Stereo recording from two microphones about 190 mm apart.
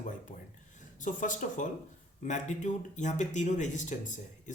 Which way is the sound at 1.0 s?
45° left (ahead or behind).